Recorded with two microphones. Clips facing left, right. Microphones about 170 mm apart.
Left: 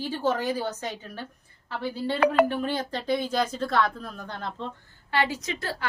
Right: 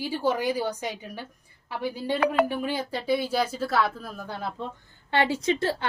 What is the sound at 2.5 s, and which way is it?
A woman's voice, 10° right (ahead or behind).